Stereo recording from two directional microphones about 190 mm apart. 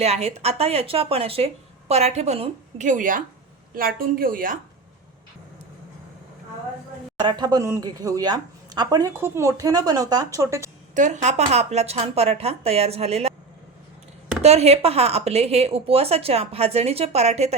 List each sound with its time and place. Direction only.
0.0 s a woman's voice: 35° right (ahead or behind); by 4.5 s 50° right (ahead or behind)
7.2 s speech: 25° right (ahead or behind)
10.9 s a woman's voice: 40° right (ahead or behind)
14.4 s a woman's voice: 35° right (ahead or behind)